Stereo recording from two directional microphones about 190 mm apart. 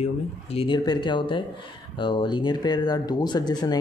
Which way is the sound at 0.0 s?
30° left (ahead or behind).